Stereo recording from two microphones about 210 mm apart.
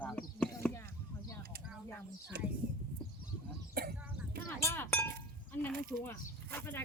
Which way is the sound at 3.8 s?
45° right (ahead or behind).